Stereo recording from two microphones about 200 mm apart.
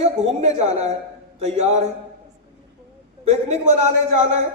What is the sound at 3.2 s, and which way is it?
Speech, 35° right (ahead or behind).